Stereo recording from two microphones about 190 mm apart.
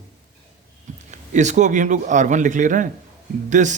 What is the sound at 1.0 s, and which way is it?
A man's voice, 40° right (ahead or behind).